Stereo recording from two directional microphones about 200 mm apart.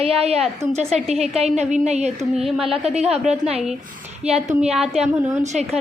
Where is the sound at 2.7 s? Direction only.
30° right (ahead or behind).